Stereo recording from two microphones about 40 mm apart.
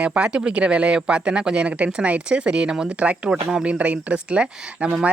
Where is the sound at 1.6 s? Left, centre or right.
Right.